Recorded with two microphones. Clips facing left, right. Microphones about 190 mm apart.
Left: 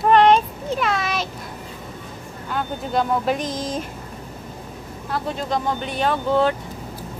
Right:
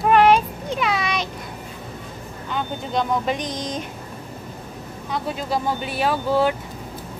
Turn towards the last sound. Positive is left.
turn(degrees=-5)  # may be behind; listen again after turning